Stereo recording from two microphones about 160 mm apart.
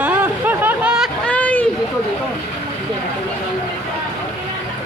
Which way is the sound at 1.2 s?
10° left (ahead or behind).